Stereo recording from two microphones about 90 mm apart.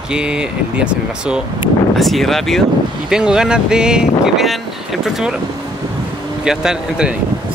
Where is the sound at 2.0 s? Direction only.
Centre (ahead or behind).